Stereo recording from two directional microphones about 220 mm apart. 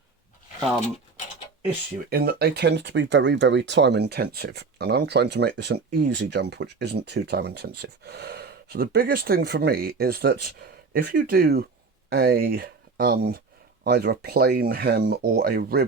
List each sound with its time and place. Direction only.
2.0 s speech: 45° right (ahead or behind)